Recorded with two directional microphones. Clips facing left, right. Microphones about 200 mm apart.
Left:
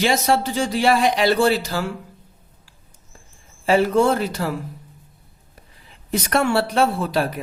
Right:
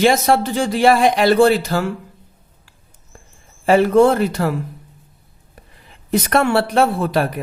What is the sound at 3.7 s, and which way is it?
Speech, 55° right (ahead or behind).